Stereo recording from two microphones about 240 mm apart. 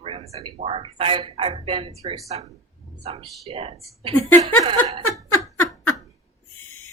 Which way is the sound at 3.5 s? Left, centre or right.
Right.